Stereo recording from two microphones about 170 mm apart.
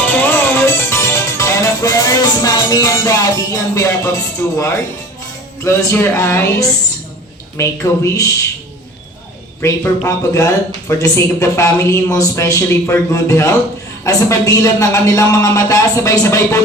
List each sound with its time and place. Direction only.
0.0 s music: 10° left (ahead or behind)
5.6 s a woman's voice: 15° left (ahead or behind)
9.6 s a woman's voice: 15° left (ahead or behind)